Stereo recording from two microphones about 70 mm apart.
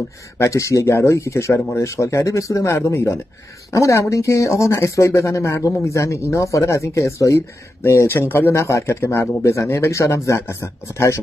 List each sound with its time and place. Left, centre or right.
0.4 s speech: left